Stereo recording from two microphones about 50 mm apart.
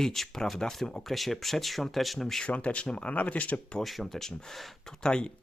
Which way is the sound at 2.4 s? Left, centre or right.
Left.